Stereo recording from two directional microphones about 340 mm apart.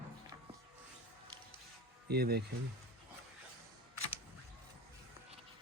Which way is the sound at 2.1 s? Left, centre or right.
Right.